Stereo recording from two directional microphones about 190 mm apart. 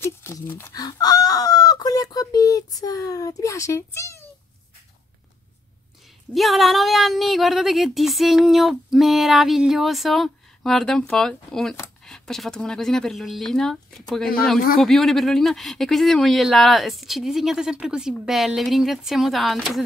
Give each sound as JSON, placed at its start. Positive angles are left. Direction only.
{"t": 0.0, "sound": "chicken", "side_deg": 10}
{"t": 6.3, "sound": "a woman's voice", "side_deg": 0}